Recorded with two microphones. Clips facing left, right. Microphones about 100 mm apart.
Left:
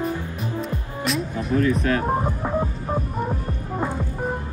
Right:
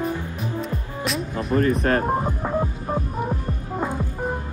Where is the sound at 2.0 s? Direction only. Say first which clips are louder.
Even; centre (ahead or behind).